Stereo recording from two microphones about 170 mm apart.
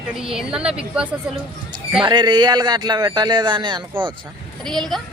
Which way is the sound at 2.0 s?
25° right (ahead or behind).